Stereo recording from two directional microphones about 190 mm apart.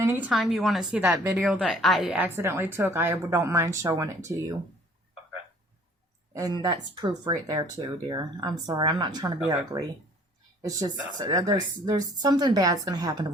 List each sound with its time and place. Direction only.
0.0 s a woman's voice: 10° right (ahead or behind)
0.3 s a woman's voice: centre (ahead or behind)
1.4 s a woman's voice: centre (ahead or behind)
6.3 s speech: 20° right (ahead or behind)
10.6 s speech: 20° right (ahead or behind)